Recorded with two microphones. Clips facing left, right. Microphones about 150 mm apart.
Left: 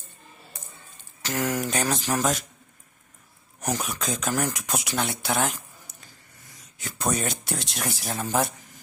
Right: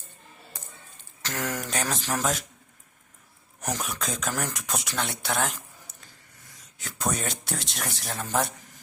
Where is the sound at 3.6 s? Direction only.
Centre (ahead or behind).